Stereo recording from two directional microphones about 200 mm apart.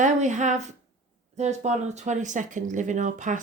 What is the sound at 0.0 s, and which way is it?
Speech, 35° right (ahead or behind).